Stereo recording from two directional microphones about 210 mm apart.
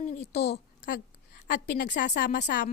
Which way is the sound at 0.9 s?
40° left (ahead or behind).